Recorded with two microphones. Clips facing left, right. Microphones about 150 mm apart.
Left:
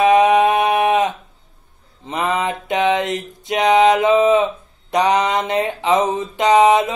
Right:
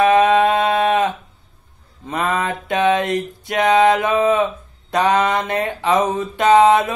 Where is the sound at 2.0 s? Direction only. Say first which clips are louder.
Left 1 dB; 20° left (ahead or behind).